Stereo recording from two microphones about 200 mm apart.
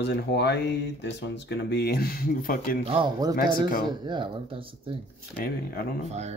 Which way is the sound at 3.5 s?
45° left (ahead or behind).